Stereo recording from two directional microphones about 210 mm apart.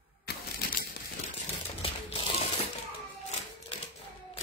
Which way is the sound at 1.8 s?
30° left (ahead or behind).